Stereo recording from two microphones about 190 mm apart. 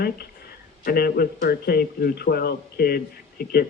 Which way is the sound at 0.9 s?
55° left (ahead or behind).